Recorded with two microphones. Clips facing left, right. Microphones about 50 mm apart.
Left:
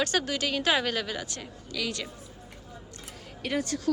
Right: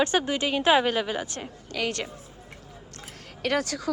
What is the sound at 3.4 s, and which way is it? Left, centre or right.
Speech, right.